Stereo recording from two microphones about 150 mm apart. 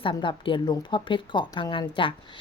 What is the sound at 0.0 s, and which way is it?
Speech, 35° left (ahead or behind).